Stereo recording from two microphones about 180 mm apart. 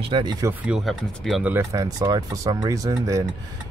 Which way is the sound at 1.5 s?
15° right (ahead or behind).